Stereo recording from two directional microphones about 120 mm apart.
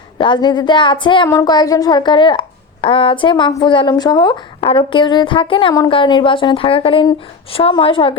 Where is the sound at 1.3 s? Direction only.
30° left (ahead or behind).